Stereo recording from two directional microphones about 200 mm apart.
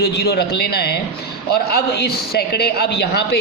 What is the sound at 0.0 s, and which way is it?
A man's voice, 55° left (ahead or behind).